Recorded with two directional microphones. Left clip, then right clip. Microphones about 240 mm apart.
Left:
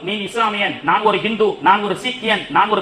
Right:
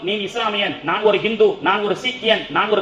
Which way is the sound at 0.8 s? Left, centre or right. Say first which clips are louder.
Left 2 dB; left.